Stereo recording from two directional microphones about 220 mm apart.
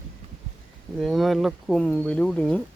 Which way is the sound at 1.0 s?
Centre (ahead or behind).